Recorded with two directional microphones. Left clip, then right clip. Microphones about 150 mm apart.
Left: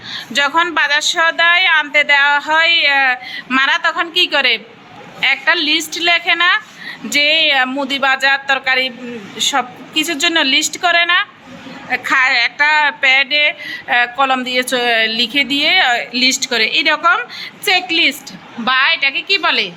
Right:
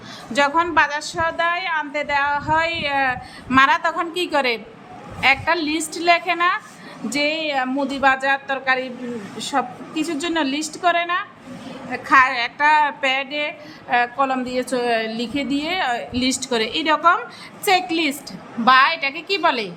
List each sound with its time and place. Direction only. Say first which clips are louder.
0.3 s a woman's voice: left 3 dB; 10° right (ahead or behind)